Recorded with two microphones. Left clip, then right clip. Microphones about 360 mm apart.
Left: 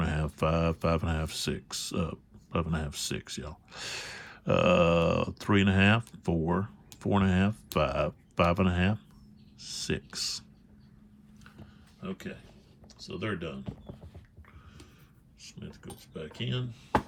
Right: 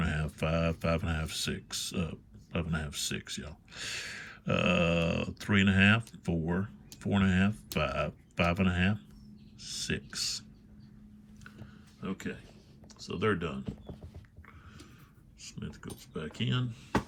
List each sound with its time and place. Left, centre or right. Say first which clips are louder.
0.0 s speech: left 4 dB; centre
12.0 s speech: right 1 dB; centre
15.4 s speech: right 2 dB; centre